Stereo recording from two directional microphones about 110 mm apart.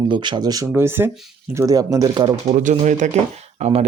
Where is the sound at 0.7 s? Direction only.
20° right (ahead or behind).